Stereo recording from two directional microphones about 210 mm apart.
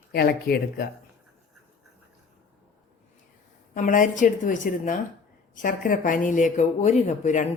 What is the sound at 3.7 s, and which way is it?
Speech, 40° left (ahead or behind).